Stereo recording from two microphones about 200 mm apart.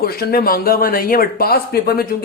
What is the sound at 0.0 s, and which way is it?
Speech, 50° left (ahead or behind).